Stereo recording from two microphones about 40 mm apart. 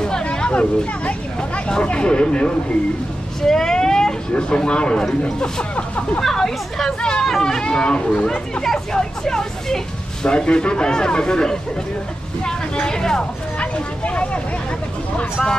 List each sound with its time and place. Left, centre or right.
0.0 s speech: left
3.4 s speech: centre
6.2 s speech: centre
7.0 s speech: left
10.2 s speech: left
13.6 s speech: left